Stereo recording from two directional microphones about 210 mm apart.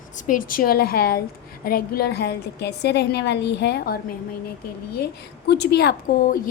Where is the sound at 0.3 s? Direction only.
40° left (ahead or behind).